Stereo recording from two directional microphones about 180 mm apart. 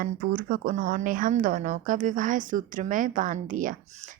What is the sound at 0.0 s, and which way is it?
A woman's voice, 50° right (ahead or behind).